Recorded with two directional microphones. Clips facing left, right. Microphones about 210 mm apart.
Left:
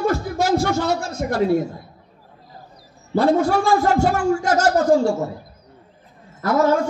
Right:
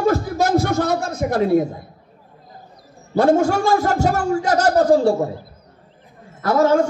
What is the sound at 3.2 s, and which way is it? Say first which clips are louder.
A man's voice: right 2 dB; 45° right (ahead or behind).